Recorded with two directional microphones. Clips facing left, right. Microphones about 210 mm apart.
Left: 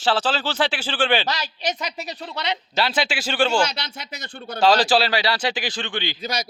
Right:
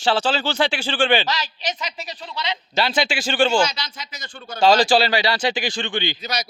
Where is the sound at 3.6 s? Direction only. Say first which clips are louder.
Right 1 dB; 60° left (ahead or behind).